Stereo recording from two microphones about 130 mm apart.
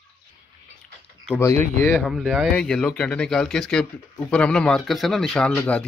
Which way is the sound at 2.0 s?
5° right (ahead or behind).